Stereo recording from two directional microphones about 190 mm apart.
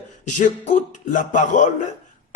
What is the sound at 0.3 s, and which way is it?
A man's voice, 40° left (ahead or behind).